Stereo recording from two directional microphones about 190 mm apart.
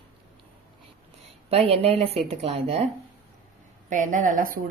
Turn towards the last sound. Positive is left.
turn(degrees=-45)  # may be behind; listen again after turning